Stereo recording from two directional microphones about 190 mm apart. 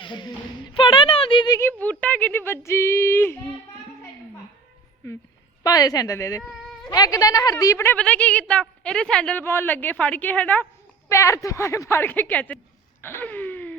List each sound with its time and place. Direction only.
0.0 s a woman's voice: 25° left (ahead or behind)
5.6 s a woman's voice: 20° left (ahead or behind)
6.4 s speech: centre (ahead or behind)
6.9 s a woman's voice: 20° left (ahead or behind)
13.0 s a sound: 10° left (ahead or behind)